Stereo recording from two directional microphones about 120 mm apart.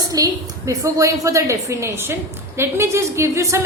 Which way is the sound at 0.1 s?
30° right (ahead or behind).